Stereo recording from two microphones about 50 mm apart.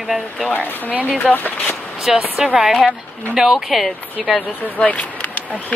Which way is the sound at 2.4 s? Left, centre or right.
Centre.